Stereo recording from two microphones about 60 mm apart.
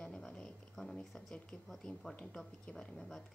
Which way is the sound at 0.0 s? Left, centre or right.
Centre.